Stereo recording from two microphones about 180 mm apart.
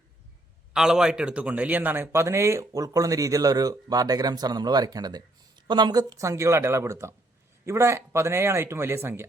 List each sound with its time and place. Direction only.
0.7 s a man's voice: 5° right (ahead or behind)